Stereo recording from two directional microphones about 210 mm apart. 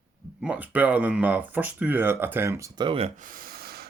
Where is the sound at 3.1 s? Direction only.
40° right (ahead or behind).